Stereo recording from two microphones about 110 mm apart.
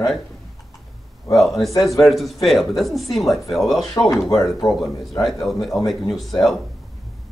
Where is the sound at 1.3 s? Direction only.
Centre (ahead or behind).